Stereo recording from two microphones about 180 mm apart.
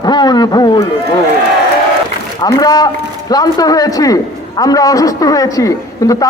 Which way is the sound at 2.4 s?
20° left (ahead or behind).